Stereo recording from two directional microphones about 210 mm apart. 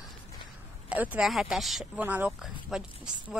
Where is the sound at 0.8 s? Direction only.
5° right (ahead or behind).